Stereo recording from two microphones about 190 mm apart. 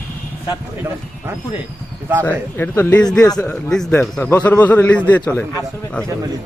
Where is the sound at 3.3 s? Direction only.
20° left (ahead or behind).